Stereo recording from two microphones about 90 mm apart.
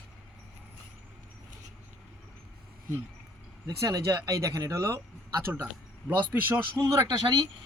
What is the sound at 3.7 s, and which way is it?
Speech, 35° right (ahead or behind).